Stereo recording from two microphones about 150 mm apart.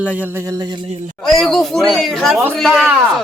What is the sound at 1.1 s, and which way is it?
Speech, 5° left (ahead or behind).